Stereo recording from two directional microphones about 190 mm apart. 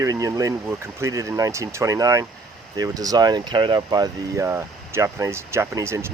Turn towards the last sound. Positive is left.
turn(degrees=-15)  # may be behind; listen again after turning